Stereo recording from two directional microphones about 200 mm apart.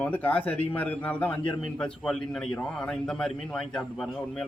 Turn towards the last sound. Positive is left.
turn(degrees=0)  # may be behind; listen again after turning